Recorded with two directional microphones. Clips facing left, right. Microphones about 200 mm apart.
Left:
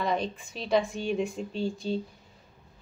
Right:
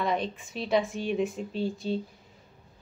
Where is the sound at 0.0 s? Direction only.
Centre (ahead or behind).